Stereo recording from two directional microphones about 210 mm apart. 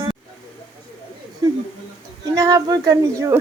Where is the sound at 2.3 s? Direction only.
15° right (ahead or behind).